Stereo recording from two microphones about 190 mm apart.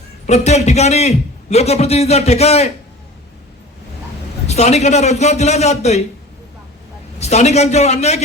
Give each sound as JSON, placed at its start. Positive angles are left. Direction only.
{"t": 0.3, "sound": "a man's voice", "side_deg": 35}
{"t": 4.4, "sound": "a man's voice", "side_deg": 35}
{"t": 7.2, "sound": "a man's voice", "side_deg": 35}